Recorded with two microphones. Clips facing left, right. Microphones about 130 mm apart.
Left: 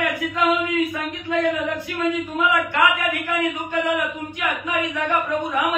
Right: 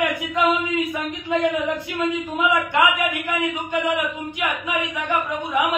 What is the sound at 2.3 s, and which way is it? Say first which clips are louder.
Speech: right 1 dB; 15° right (ahead or behind).